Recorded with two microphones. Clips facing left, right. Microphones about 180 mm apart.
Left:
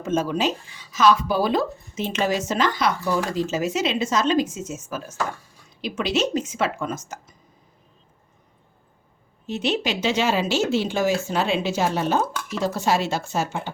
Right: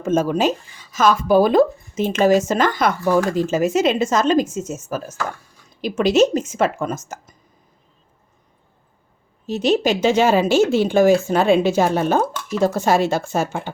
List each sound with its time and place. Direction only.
0.0 s speech: 50° right (ahead or behind)
9.5 s speech: 40° right (ahead or behind)